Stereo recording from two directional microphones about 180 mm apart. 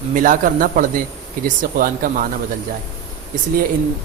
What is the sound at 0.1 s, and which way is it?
Speech, 50° right (ahead or behind).